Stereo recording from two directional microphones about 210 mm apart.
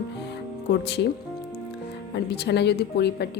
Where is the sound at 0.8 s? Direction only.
55° left (ahead or behind).